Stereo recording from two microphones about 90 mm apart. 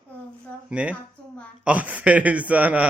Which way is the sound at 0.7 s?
15° right (ahead or behind).